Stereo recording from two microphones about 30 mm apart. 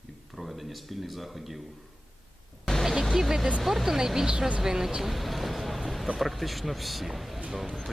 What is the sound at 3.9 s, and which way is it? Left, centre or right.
Speech, centre.